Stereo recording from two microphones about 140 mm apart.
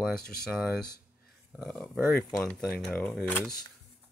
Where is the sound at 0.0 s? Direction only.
5° left (ahead or behind).